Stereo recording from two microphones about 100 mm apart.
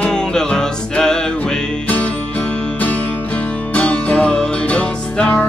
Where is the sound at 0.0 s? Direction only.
5° left (ahead or behind).